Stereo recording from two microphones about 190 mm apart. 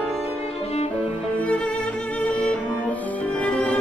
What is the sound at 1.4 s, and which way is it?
Music, 5° left (ahead or behind).